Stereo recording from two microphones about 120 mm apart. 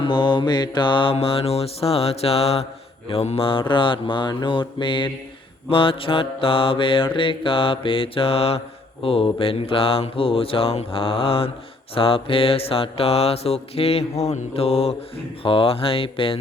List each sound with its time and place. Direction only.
0.0 s mantra: 40° left (ahead or behind)